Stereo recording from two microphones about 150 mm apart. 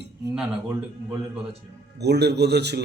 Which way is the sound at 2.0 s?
90° right.